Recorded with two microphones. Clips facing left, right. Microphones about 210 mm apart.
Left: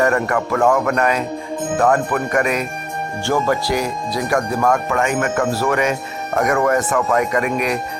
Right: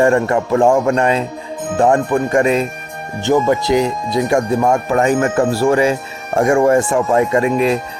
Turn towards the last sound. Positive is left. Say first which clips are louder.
# right 5 dB
turn(degrees=-25)  # may be behind; listen again after turning